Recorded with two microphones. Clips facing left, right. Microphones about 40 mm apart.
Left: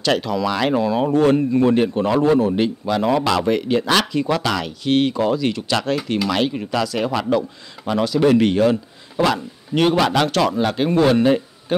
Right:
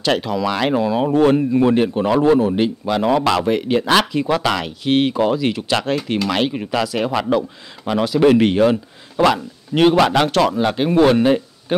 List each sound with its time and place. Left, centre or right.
0.0 s speech: centre